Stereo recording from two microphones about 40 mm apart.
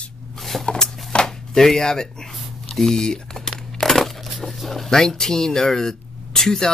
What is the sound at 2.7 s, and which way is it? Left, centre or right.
Typing, centre.